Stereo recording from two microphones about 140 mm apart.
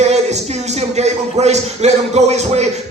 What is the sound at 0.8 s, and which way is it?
Speech, 50° right (ahead or behind).